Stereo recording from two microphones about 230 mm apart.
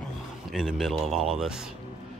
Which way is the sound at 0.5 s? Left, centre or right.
Centre.